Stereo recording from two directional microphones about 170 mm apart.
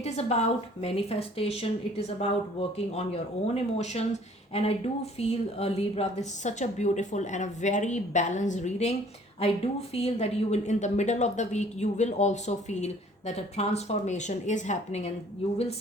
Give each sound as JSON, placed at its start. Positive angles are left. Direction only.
{"t": 0.0, "sound": "a woman's voice", "side_deg": 40}